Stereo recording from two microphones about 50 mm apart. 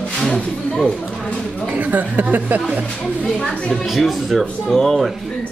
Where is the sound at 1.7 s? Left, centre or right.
Right.